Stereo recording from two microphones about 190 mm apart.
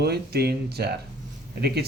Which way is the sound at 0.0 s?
55° right (ahead or behind).